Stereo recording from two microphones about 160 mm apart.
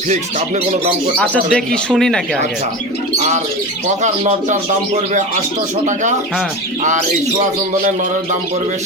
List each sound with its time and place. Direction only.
0.1 s speech: 50° right (ahead or behind)
1.2 s speech: 5° left (ahead or behind)
4.0 s speech: 45° right (ahead or behind)